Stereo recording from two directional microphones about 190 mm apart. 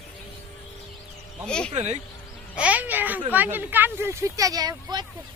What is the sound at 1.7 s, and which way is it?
Speech, 35° right (ahead or behind).